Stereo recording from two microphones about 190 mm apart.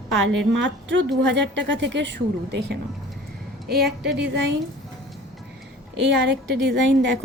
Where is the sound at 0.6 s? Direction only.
75° right (ahead or behind); by 4.1 s 55° right (ahead or behind).